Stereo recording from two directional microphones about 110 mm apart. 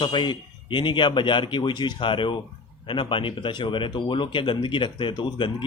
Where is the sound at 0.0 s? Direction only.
45° left (ahead or behind).